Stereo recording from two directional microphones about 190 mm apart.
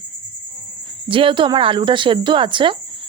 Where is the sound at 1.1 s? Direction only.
25° right (ahead or behind).